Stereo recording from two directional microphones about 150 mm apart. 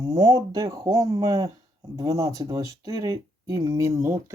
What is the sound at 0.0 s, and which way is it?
Speech, 25° right (ahead or behind).